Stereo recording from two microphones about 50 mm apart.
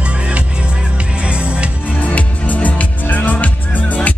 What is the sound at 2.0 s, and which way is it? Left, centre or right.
Music, left.